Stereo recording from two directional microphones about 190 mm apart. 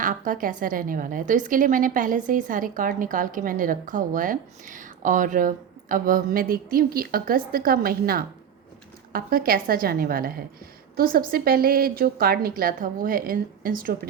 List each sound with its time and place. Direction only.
0.0 s a woman's voice: 45° right (ahead or behind)